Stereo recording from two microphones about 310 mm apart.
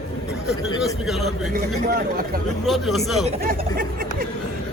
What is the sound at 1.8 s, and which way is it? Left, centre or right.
Speech, right.